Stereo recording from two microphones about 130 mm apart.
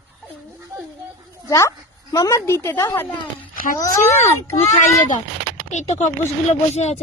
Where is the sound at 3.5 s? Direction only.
90° left.